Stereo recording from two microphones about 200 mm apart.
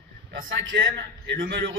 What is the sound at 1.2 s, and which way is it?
Speech, 60° right (ahead or behind).